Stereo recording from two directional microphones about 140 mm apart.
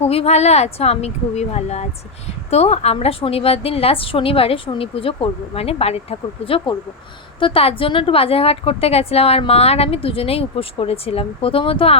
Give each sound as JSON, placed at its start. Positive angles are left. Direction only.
{"t": 0.0, "sound": "speech", "side_deg": 45}